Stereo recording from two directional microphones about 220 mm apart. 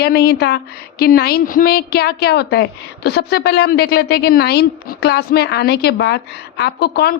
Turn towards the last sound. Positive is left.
turn(degrees=45)  # may be behind; listen again after turning